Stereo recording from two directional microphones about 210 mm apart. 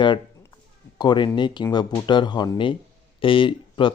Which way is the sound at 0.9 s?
20° left (ahead or behind).